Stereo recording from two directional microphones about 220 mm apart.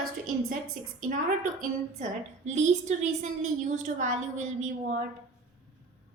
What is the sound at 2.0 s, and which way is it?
A woman's voice, 30° right (ahead or behind).